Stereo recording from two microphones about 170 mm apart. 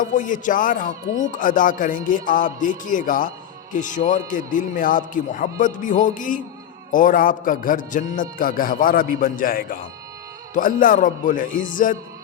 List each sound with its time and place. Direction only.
0.0 s a man's voice: 50° left (ahead or behind)